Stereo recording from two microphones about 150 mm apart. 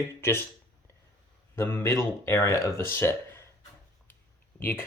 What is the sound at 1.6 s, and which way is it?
Speech, 15° left (ahead or behind).